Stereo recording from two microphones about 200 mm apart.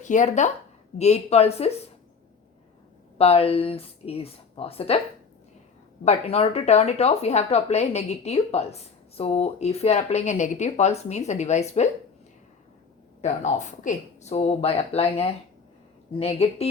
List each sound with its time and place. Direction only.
0.0 s speech: 40° left (ahead or behind)
3.2 s speech: 30° left (ahead or behind)
6.1 s speech: 30° left (ahead or behind)
13.2 s speech: 35° left (ahead or behind)